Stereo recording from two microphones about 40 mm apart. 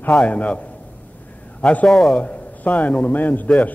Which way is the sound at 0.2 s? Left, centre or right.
Left.